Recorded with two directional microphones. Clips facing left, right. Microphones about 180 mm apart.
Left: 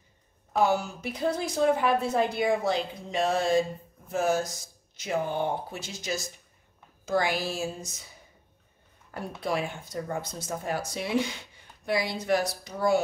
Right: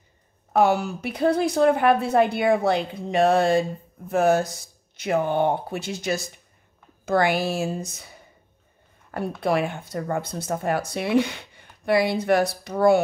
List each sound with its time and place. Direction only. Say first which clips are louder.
0.5 s speech: right 5 dB; 65° right (ahead or behind)
9.4 s speech: right 6 dB; 60° right (ahead or behind)